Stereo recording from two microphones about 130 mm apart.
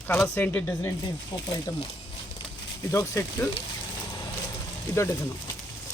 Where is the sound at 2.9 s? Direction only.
20° left (ahead or behind).